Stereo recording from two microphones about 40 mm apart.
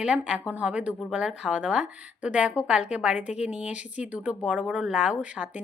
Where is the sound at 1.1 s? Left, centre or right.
Centre.